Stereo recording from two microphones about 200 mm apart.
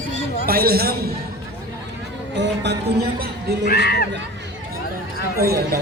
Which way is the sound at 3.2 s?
55° right (ahead or behind).